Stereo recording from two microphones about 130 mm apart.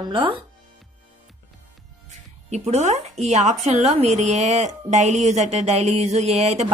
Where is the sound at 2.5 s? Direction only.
55° right (ahead or behind).